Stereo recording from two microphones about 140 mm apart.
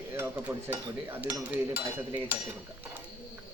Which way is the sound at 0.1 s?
15° right (ahead or behind).